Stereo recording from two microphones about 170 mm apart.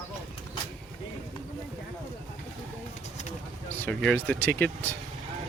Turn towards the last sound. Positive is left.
turn(degrees=10)  # may be behind; listen again after turning